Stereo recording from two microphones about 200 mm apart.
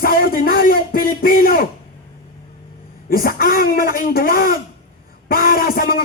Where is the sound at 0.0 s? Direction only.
45° left (ahead or behind).